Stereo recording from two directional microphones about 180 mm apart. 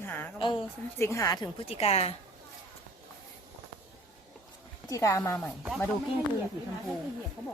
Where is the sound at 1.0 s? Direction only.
15° left (ahead or behind).